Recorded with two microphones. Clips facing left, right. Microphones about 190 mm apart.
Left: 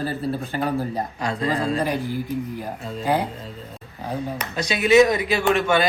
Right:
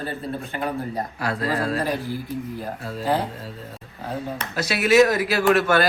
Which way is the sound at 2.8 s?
5° right (ahead or behind).